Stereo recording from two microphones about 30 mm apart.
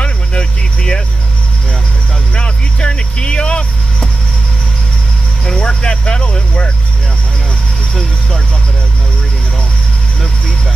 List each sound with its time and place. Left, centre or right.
0.0 s cricket: left
2.3 s vehicle: left
5.6 s vehicle: left